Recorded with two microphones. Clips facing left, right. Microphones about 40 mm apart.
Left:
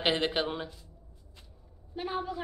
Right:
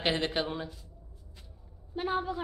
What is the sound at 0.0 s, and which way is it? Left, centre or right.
Speech, centre.